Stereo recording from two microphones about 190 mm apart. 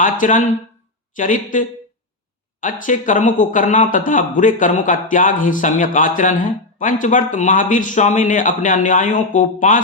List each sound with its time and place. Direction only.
0.0 s speech: 40° left (ahead or behind)